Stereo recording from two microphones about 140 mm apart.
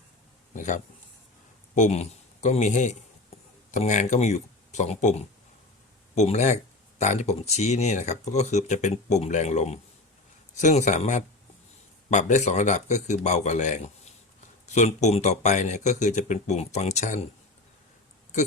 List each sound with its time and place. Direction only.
0.5 s a man's voice: 60° left (ahead or behind)